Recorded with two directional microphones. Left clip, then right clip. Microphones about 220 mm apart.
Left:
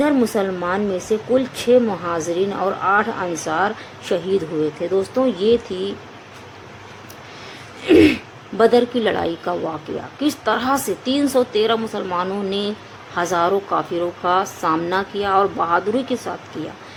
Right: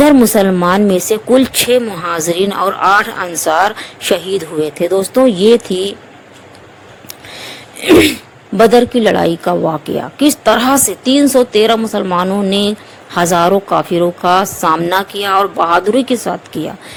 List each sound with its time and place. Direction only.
0.0 s speech: 45° right (ahead or behind)
7.8 s speech: 35° right (ahead or behind)